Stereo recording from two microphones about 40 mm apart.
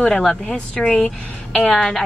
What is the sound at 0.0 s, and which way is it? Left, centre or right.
A woman's voice, centre.